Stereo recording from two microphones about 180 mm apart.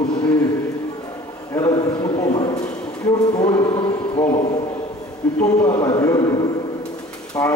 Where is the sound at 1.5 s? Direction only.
15° left (ahead or behind).